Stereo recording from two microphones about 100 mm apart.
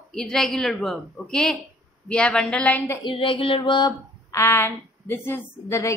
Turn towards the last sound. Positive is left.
turn(degrees=25)  # may be behind; listen again after turning